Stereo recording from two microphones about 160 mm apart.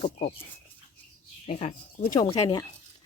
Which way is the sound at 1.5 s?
45° left (ahead or behind).